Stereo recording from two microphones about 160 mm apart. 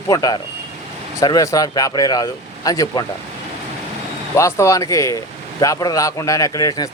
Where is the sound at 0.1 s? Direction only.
25° left (ahead or behind).